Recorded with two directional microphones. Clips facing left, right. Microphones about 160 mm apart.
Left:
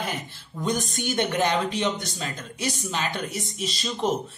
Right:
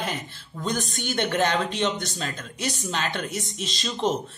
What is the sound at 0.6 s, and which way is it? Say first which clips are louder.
Speech: left 2 dB; 15° left (ahead or behind).